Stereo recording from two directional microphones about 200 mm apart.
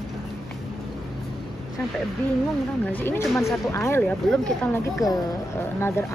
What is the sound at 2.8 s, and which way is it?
Speech, 10° left (ahead or behind).